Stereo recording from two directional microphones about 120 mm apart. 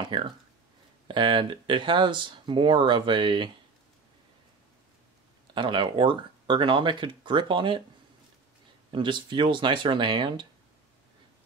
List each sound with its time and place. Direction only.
0.0 s speech: 45° right (ahead or behind)
5.5 s speech: 40° right (ahead or behind)
8.9 s speech: 40° right (ahead or behind)